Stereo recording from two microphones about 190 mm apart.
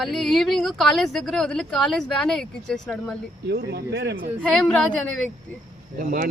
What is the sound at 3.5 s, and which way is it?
Speech, 60° right (ahead or behind).